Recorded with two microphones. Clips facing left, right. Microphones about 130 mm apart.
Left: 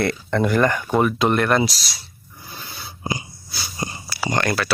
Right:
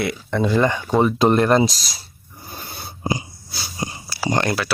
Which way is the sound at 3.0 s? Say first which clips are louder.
Right 4 dB; 35° right (ahead or behind).